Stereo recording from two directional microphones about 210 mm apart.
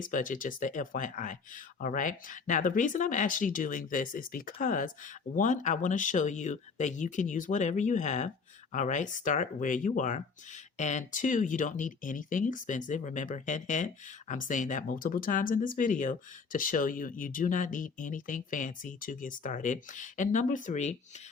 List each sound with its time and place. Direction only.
0.0 s speech: 40° left (ahead or behind)